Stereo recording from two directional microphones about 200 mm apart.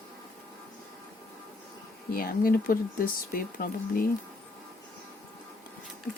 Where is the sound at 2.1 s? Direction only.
45° left (ahead or behind).